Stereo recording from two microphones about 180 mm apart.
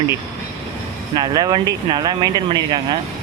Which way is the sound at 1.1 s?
20° right (ahead or behind).